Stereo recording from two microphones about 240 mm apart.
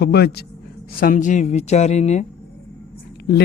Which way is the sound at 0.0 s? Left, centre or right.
Left.